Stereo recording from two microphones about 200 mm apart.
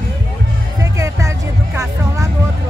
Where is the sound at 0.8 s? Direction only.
15° right (ahead or behind).